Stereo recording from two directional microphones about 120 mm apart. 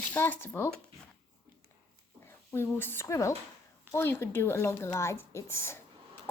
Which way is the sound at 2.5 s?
20° left (ahead or behind).